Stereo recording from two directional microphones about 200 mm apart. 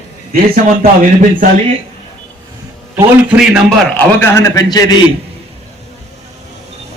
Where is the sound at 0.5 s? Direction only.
40° right (ahead or behind).